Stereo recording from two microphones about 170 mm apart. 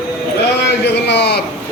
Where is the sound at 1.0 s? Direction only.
85° left.